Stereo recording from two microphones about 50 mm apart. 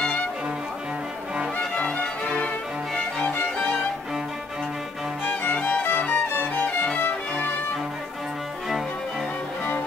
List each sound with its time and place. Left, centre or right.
1.8 s music: left
5.2 s music: left